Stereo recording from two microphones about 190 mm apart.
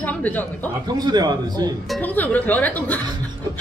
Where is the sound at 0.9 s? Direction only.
20° right (ahead or behind).